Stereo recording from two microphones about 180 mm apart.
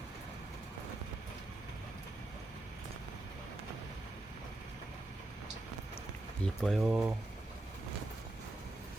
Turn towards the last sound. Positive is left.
turn(degrees=-5)  # may be behind; listen again after turning